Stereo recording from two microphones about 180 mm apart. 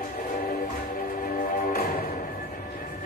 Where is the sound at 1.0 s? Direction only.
50° left (ahead or behind).